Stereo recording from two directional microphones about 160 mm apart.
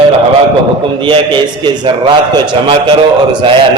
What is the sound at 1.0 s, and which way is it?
A man's voice, 30° right (ahead or behind).